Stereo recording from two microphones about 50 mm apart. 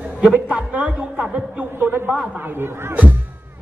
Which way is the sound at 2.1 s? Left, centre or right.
Right.